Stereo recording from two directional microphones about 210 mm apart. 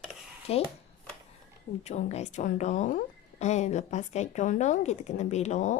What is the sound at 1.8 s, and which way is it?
Speech, 30° left (ahead or behind).